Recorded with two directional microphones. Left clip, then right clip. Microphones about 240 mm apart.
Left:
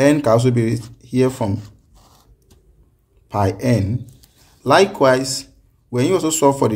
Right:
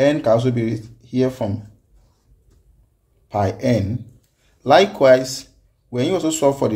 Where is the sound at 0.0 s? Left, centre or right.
Left.